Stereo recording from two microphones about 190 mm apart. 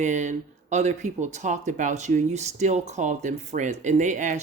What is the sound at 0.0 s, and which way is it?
Speech, 40° right (ahead or behind).